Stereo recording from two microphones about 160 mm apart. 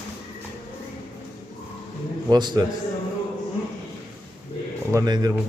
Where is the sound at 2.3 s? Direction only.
25° right (ahead or behind).